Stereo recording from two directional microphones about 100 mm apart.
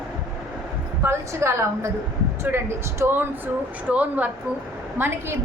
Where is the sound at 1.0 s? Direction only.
25° right (ahead or behind).